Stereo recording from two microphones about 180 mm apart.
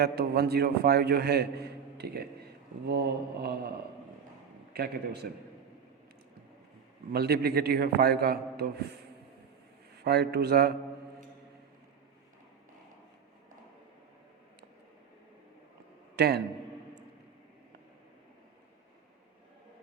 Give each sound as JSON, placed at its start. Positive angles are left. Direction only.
{"t": 0.0, "sound": "a man's voice", "side_deg": -60}
{"t": 4.7, "sound": "a man's voice", "side_deg": -60}
{"t": 7.1, "sound": "a man's voice", "side_deg": -60}
{"t": 10.0, "sound": "a man's voice", "side_deg": -65}
{"t": 16.1, "sound": "a man's voice", "side_deg": -65}